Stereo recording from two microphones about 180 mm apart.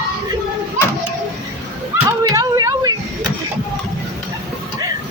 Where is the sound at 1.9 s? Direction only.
20° right (ahead or behind).